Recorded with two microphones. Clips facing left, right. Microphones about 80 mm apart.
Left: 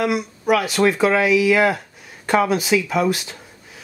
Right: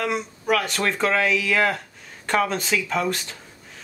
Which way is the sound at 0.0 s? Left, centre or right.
Centre.